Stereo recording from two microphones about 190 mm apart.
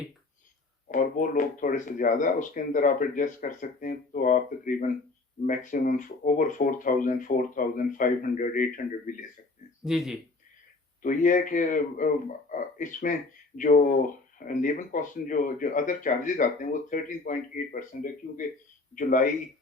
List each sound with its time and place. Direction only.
0.9 s speech: 45° left (ahead or behind)
9.8 s a man's voice: centre (ahead or behind)
11.0 s speech: 45° left (ahead or behind)